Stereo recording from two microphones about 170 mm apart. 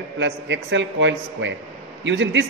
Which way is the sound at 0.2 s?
90° right.